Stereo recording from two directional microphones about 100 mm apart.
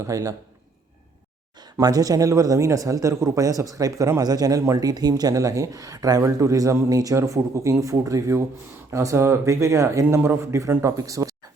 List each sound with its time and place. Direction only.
0.0 s speech: 35° right (ahead or behind)
1.8 s speech: 40° right (ahead or behind)